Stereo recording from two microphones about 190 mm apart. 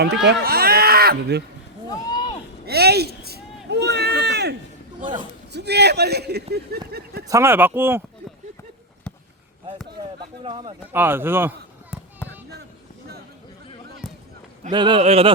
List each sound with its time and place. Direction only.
0.0 s speech: 60° right (ahead or behind)
1.9 s a sound: 20° left (ahead or behind)
2.6 s a sound: 55° right (ahead or behind)
5.5 s a man's voice: 60° right (ahead or behind)
7.3 s speech: 15° right (ahead or behind)
10.4 s speech: 25° right (ahead or behind)
10.9 s speech: 10° right (ahead or behind)
14.7 s speech: 25° right (ahead or behind)
15.0 s a sound: 30° right (ahead or behind)